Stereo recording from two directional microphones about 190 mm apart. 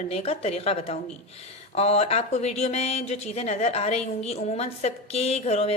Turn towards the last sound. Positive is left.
turn(degrees=35)  # may be behind; listen again after turning